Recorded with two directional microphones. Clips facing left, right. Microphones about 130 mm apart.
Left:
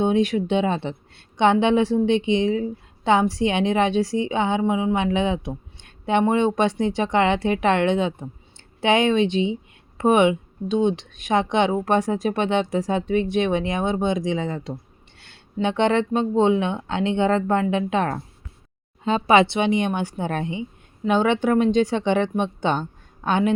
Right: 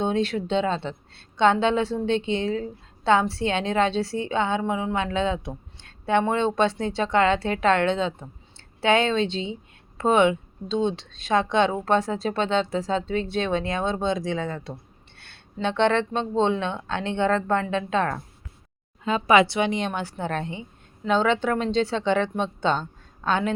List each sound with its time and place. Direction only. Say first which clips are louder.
0.0 s speech: left 4 dB; 15° left (ahead or behind)